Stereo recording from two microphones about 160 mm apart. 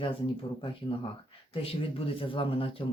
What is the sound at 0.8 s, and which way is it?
Speech, 30° left (ahead or behind).